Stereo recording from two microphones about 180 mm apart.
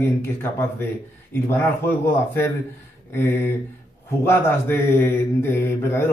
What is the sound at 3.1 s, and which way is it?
Speech, 15° left (ahead or behind).